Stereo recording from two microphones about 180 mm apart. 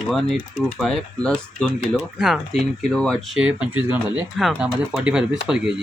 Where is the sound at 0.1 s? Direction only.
Centre (ahead or behind).